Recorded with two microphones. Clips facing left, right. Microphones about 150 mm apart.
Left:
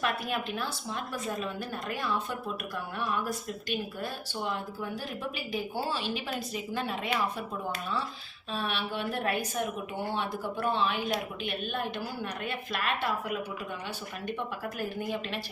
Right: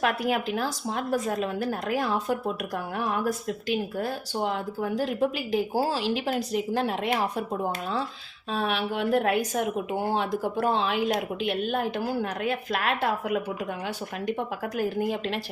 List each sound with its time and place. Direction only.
0.0 s a woman's voice: 90° right
8.4 s a woman's voice: 90° right
14.6 s a woman's voice: 90° right